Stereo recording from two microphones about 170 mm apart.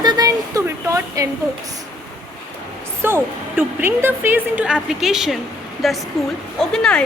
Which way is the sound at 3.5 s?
10° right (ahead or behind).